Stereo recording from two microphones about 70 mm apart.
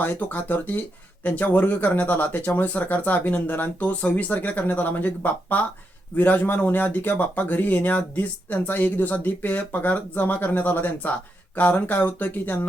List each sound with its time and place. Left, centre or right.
0.0 s speech: left